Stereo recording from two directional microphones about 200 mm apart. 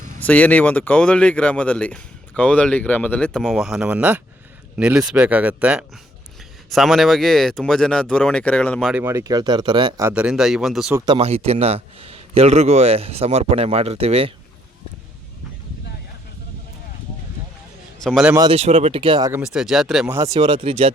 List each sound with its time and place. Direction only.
0.2 s speech: 10° left (ahead or behind)
9.0 s speech: 15° right (ahead or behind)
10.1 s speech: 5° right (ahead or behind)
10.9 s a man's voice: 20° right (ahead or behind)
18.0 s speech: centre (ahead or behind)
18.3 s speech: 30° right (ahead or behind)
19.3 s speech: 5° right (ahead or behind)
20.1 s speech: 15° right (ahead or behind)